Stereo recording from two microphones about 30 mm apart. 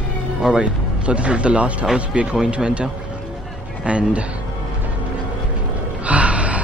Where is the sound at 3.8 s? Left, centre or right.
Right.